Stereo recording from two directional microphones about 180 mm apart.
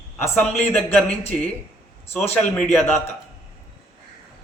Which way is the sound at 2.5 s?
5° left (ahead or behind).